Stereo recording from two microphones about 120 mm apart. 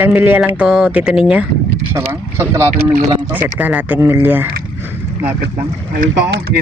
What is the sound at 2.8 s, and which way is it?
Speech, 15° right (ahead or behind).